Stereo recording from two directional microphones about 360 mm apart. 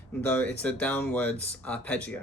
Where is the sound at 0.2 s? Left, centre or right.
Centre.